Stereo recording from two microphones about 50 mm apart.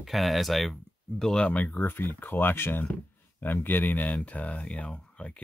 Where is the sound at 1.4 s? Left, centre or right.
Left.